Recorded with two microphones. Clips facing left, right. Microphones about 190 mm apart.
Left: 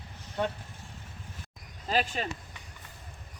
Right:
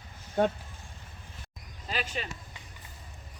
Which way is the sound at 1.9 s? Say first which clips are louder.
Left 5 dB; 40° left (ahead or behind).